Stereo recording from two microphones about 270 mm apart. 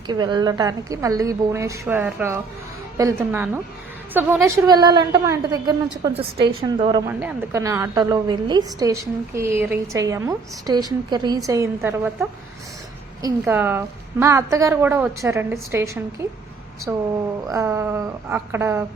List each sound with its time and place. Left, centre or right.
0.1 s a woman's voice: centre
7.1 s a woman's voice: centre
17.5 s a woman's voice: centre